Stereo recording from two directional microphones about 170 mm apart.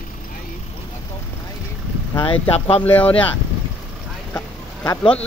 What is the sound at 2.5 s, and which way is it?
Speech, 35° left (ahead or behind).